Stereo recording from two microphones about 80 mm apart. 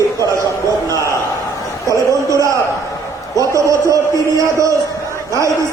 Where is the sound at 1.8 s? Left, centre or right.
Right.